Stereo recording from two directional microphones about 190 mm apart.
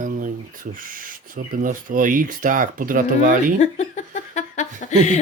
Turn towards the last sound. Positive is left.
turn(degrees=40)  # may be behind; listen again after turning